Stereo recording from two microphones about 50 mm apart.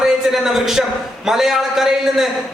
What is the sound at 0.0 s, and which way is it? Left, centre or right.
A man's voice, centre.